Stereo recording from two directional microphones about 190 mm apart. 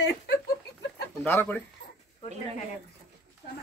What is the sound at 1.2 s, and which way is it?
Speech, 10° left (ahead or behind).